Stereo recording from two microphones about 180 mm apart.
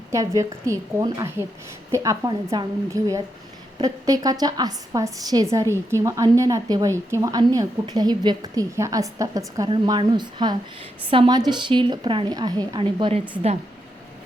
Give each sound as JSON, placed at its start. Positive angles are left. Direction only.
{"t": 0.1, "sound": "a woman's voice", "side_deg": -15}